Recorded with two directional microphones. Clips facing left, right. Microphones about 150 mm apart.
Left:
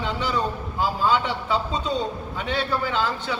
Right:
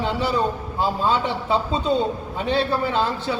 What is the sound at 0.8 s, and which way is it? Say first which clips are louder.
A man's voice: right 1 dB; 30° right (ahead or behind).